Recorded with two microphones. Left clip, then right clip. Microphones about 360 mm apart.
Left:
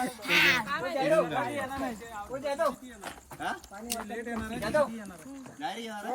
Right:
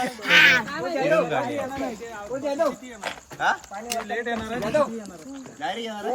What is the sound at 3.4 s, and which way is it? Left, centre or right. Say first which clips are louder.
Speech: right 12 dB; right.